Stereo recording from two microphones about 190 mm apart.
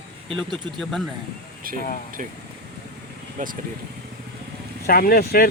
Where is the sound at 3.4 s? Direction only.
45° right (ahead or behind).